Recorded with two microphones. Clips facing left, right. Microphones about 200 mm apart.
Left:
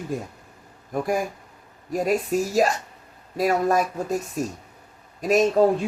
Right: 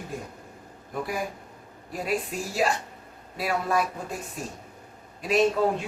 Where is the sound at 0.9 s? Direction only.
45° left (ahead or behind).